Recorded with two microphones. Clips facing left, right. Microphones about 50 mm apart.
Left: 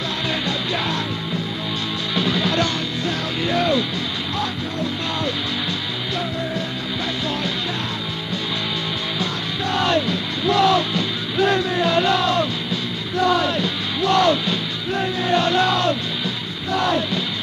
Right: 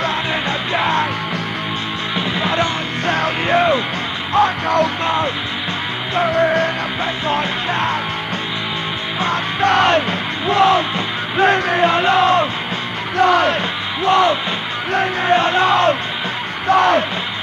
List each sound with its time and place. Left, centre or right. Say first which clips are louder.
0.3 s music: right 4 dB; right
2.1 s music: right 1 dB; right
3.1 s music: right 8 dB; right
5.0 s speech: right 6 dB; right
6.3 s music: right 10 dB; right
7.2 s speech: right 5 dB; right
9.2 s music: right 12 dB; right
10.5 s speech: right 3 dB; right
13.2 s music: right 5 dB; right
14.0 s music: right 3 dB; right
15.2 s speech: right 3 dB; right
16.6 s music: right 7 dB; right